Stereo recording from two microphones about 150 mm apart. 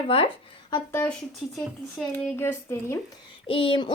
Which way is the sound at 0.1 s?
40° left (ahead or behind).